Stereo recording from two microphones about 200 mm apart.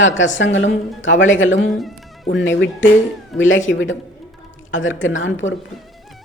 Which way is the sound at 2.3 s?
65° left (ahead or behind).